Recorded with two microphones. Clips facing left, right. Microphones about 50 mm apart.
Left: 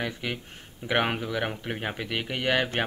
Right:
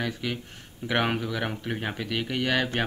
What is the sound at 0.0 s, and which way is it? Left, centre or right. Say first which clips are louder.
Speech: right 1 dB; centre.